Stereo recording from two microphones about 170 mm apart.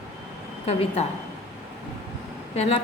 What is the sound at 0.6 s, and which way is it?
Speech, 35° left (ahead or behind).